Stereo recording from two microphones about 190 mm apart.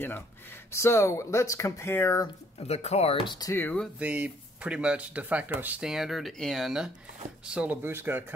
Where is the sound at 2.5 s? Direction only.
35° left (ahead or behind); by 3.9 s 5° left (ahead or behind).